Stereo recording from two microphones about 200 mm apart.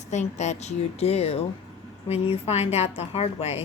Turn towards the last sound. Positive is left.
turn(degrees=30)  # may be behind; listen again after turning